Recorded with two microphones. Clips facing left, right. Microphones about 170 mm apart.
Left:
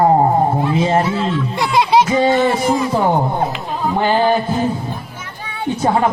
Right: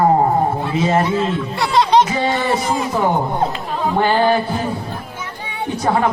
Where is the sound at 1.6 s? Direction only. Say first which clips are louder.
Even; 10° left (ahead or behind).